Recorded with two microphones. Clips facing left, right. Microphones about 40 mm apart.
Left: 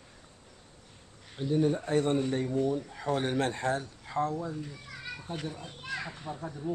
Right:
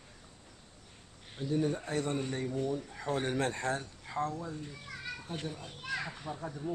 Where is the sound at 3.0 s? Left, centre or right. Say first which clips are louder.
Left 3 dB; left.